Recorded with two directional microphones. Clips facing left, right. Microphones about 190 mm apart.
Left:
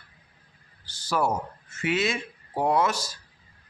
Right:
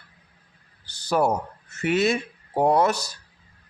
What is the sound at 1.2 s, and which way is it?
Speech, 40° right (ahead or behind).